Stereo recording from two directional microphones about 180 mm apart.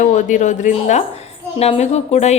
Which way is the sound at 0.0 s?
45° left (ahead or behind).